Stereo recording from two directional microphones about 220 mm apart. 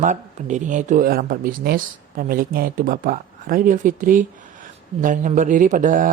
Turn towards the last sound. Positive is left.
turn(degrees=-35)  # may be behind; listen again after turning